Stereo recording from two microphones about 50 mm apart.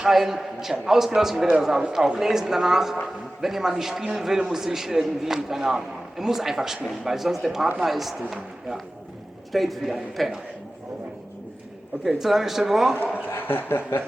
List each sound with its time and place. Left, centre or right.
0.0 s a man's voice: centre
9.5 s a man's voice: centre
12.0 s a man's voice: centre
13.2 s speech: left